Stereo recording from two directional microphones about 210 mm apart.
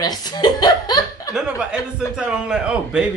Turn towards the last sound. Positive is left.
turn(degrees=-5)  # may be behind; listen again after turning